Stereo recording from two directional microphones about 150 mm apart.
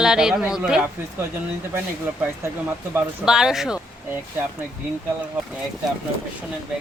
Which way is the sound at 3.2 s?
5° right (ahead or behind).